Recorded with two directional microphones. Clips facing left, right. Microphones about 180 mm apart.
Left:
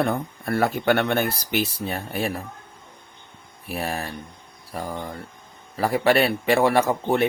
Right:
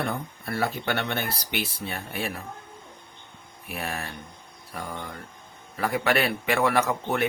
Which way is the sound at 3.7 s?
35° left (ahead or behind).